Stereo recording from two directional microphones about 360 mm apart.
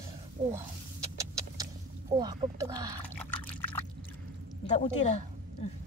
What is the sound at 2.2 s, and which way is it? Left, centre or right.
Speech, centre.